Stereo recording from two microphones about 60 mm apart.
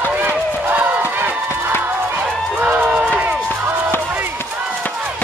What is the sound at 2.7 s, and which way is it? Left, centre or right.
Run, right.